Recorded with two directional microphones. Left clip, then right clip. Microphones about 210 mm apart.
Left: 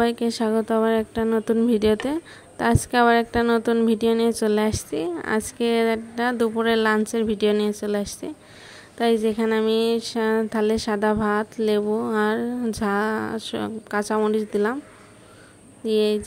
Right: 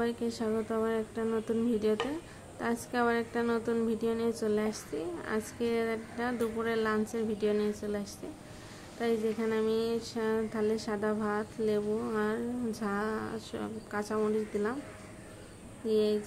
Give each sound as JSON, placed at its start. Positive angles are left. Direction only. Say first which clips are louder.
{"t": 0.0, "sound": "speech", "louder": "left 11 dB", "side_deg": 40}
{"t": 15.9, "sound": "speech", "louder": "left 8 dB", "side_deg": 40}